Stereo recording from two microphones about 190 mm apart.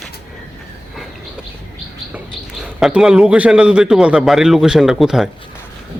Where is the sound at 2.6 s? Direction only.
5° right (ahead or behind).